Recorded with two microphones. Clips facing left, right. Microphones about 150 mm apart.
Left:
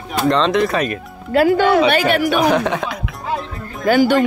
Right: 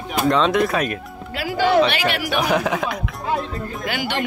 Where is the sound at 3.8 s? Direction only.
45° left (ahead or behind).